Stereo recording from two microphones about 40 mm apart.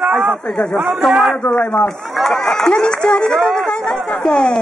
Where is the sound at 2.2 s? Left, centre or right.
Centre.